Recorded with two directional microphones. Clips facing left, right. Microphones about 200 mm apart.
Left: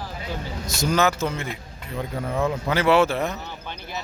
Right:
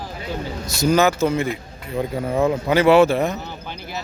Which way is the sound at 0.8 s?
10° right (ahead or behind).